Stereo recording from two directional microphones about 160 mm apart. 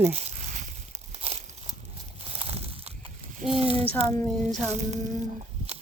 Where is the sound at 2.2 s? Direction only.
40° right (ahead or behind).